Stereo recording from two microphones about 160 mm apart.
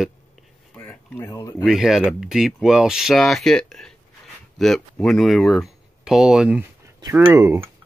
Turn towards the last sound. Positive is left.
turn(degrees=-15)  # may be behind; listen again after turning